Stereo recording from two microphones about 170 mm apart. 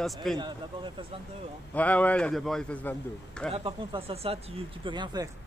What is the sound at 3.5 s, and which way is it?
Speech, 30° right (ahead or behind).